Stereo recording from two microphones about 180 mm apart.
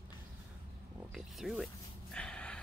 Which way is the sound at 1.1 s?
Centre (ahead or behind).